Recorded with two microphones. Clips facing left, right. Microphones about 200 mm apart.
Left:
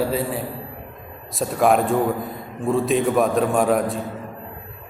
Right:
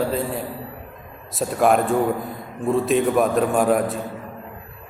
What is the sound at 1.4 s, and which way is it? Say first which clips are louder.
A man's voice: even; centre (ahead or behind).